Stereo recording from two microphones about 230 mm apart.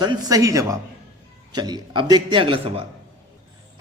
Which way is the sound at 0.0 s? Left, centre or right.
Centre.